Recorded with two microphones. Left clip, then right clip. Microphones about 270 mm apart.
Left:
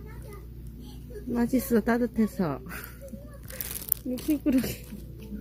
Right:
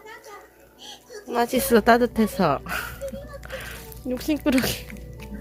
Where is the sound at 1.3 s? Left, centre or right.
Right.